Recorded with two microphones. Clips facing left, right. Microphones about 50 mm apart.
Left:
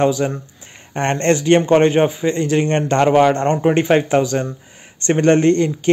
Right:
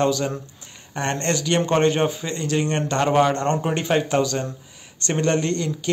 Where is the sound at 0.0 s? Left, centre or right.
Left.